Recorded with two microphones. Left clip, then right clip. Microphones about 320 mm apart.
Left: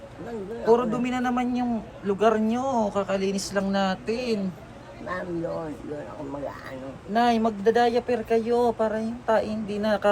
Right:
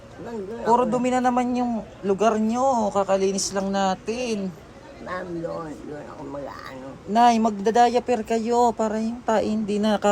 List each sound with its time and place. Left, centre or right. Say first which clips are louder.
0.6 s speech: right 2 dB; centre
7.1 s a man's voice: right 5 dB; right